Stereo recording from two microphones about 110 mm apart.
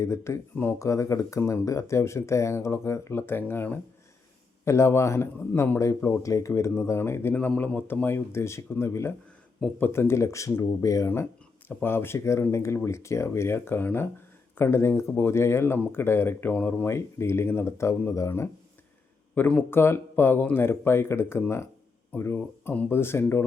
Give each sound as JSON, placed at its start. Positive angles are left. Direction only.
{"t": 0.0, "sound": "speech", "side_deg": 25}
{"t": 19.3, "sound": "speech", "side_deg": 15}